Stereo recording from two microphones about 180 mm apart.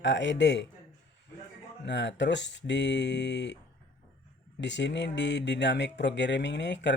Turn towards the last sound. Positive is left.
turn(degrees=80)